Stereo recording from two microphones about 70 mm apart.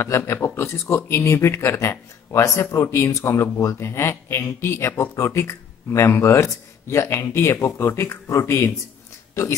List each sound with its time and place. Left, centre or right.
0.0 s speech: left